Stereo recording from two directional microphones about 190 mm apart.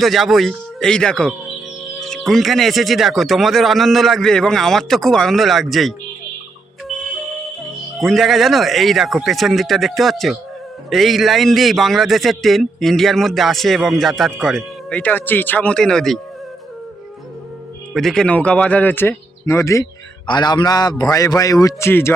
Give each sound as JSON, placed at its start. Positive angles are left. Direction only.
{"t": 0.0, "sound": "a man's voice", "side_deg": 0}
{"t": 7.9, "sound": "a man's voice", "side_deg": 0}
{"t": 17.9, "sound": "speech", "side_deg": 0}